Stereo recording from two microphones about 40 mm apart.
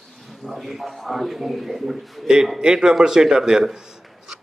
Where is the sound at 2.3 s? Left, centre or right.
Centre.